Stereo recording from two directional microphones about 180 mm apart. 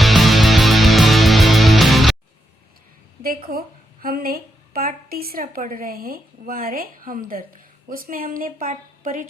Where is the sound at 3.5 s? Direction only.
55° right (ahead or behind).